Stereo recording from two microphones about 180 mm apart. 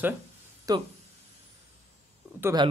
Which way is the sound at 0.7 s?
20° right (ahead or behind).